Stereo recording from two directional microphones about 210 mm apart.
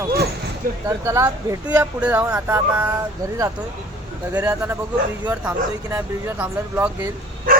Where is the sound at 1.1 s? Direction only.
15° right (ahead or behind).